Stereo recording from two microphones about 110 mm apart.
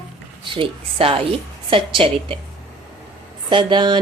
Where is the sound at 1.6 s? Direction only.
50° right (ahead or behind).